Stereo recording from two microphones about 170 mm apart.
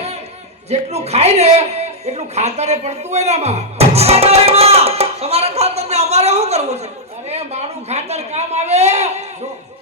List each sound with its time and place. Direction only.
0.7 s a man's voice: 40° right (ahead or behind)